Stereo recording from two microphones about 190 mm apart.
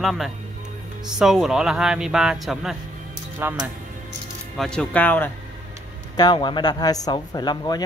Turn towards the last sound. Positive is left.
turn(degrees=20)  # may be behind; listen again after turning